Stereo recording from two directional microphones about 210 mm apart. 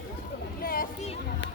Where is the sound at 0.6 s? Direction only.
45° left (ahead or behind).